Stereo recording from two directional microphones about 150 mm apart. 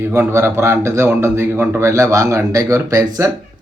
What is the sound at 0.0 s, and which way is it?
A man's voice, 15° right (ahead or behind).